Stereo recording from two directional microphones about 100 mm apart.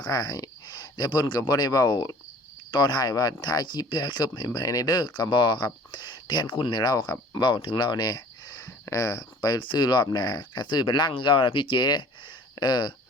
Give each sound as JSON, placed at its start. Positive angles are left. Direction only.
{"t": 0.0, "sound": "speech", "side_deg": 40}